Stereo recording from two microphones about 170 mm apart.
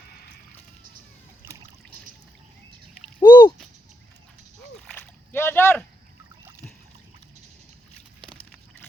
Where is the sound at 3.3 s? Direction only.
25° left (ahead or behind).